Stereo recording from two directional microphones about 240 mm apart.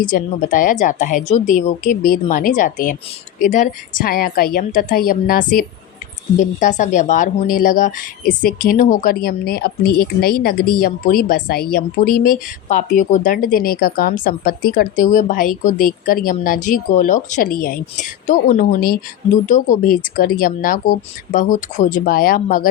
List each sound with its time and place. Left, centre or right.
0.0 s a woman's voice: left